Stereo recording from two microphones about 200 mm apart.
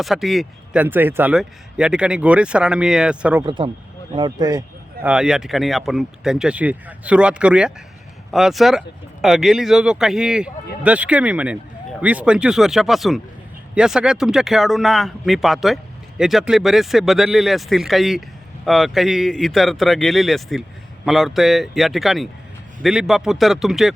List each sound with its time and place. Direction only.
0.0 s speech: centre (ahead or behind)
3.4 s speech: 25° right (ahead or behind)
5.0 s speech: 5° right (ahead or behind)